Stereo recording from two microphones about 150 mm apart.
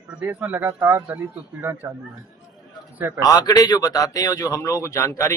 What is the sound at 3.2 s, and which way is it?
A man's voice, 25° left (ahead or behind).